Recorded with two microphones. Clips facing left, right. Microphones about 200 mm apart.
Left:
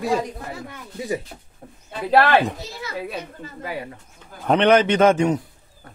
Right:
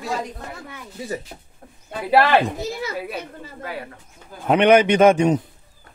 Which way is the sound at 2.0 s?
10° right (ahead or behind).